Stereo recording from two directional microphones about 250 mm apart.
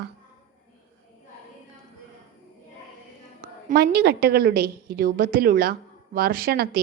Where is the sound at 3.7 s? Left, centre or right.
Right.